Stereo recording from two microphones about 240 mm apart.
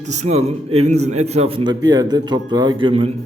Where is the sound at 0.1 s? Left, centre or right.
Right.